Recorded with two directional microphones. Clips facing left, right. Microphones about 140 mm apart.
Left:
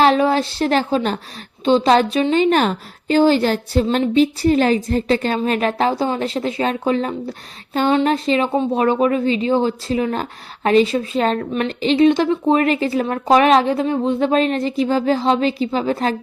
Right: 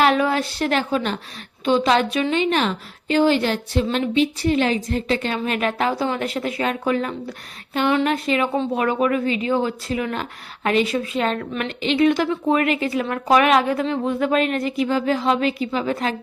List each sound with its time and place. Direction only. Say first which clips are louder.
0.0 s speech: left 4 dB; 30° left (ahead or behind)